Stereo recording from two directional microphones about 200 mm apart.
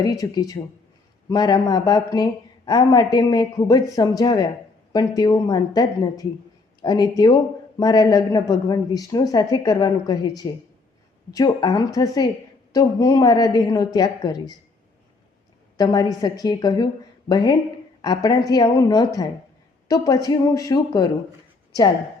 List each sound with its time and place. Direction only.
0.0 s a woman's voice: 20° left (ahead or behind)
15.8 s a woman's voice: 20° left (ahead or behind)